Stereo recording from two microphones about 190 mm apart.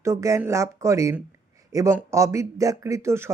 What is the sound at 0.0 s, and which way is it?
Speech, 15° right (ahead or behind).